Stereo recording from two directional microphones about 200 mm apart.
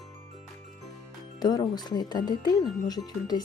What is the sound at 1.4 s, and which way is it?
Speech, 20° left (ahead or behind).